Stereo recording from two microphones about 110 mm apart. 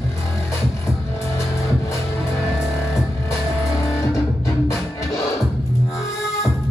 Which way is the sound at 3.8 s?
30° left (ahead or behind).